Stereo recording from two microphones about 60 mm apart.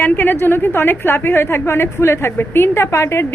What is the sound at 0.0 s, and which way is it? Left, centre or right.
A woman's voice, left.